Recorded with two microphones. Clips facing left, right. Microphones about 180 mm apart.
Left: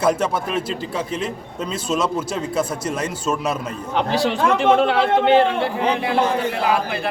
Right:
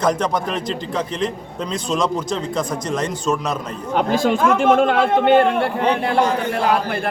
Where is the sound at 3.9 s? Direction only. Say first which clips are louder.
Right 3 dB; 45° right (ahead or behind).